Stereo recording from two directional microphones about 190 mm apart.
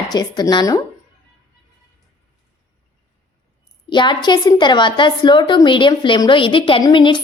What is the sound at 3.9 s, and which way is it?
A woman's voice, 25° left (ahead or behind).